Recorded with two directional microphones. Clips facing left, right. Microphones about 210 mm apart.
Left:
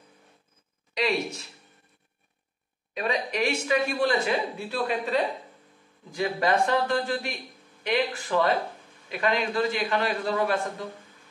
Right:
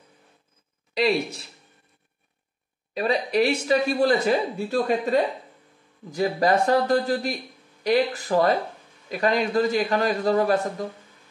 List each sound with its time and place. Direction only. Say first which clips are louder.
0.9 s speech: right 4 dB; 35° right (ahead or behind)
2.9 s speech: right 5 dB; 35° right (ahead or behind)